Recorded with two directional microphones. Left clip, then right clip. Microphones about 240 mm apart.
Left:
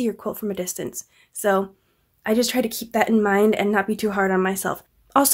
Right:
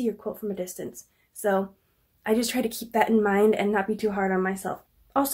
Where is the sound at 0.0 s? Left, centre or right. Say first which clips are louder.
Left 4 dB; left.